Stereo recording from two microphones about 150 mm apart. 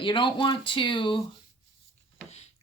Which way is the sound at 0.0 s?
35° left (ahead or behind).